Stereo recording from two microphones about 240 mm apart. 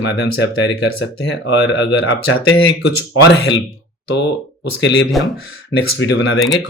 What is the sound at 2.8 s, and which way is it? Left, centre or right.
Speech, left.